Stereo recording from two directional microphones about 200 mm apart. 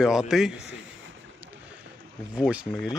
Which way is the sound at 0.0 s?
Centre (ahead or behind).